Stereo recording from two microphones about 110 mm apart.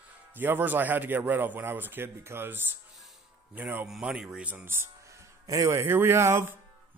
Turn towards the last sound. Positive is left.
turn(degrees=-25)  # may be behind; listen again after turning